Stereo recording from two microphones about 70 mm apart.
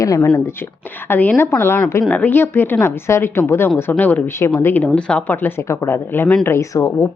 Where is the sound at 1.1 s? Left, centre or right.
Left.